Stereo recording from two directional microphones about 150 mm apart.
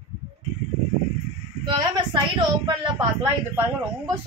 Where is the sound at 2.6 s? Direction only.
20° right (ahead or behind).